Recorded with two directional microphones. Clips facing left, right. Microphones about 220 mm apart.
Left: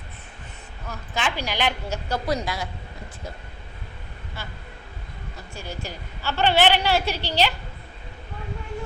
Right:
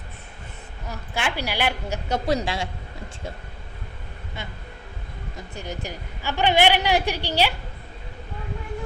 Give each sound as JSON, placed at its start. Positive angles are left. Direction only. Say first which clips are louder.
{"t": 0.9, "sound": "a woman's voice", "louder": "even", "side_deg": -10}
{"t": 2.0, "sound": "a woman's voice", "louder": "right 3 dB", "side_deg": -25}
{"t": 5.5, "sound": "a woman's voice", "louder": "right 2 dB", "side_deg": -15}